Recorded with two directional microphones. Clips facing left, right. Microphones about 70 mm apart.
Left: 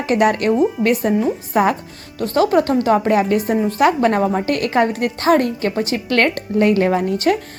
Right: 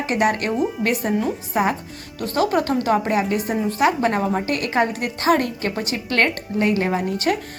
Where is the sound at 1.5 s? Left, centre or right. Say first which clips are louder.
Left 5 dB; left.